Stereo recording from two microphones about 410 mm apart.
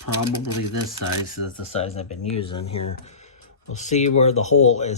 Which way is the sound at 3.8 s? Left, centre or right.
Centre.